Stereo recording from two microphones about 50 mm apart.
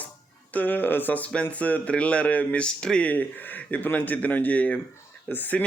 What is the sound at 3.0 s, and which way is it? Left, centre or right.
Speech, left.